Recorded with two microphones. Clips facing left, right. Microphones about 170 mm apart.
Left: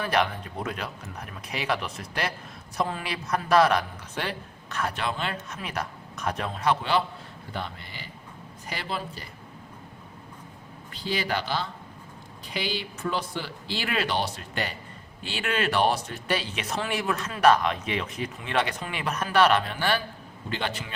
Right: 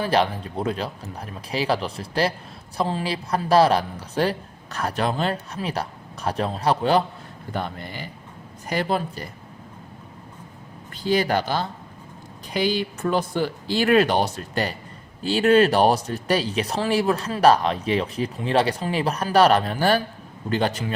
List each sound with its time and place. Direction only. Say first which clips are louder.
0.0 s speech: right 4 dB; 30° right (ahead or behind); by 9.2 s 50° right (ahead or behind)
10.9 s speech: right 8 dB; 45° right (ahead or behind)